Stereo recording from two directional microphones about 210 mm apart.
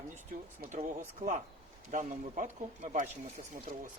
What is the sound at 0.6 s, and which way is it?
Speech, 35° right (ahead or behind).